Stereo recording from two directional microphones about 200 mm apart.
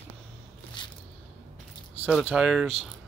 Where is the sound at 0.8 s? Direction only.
20° left (ahead or behind).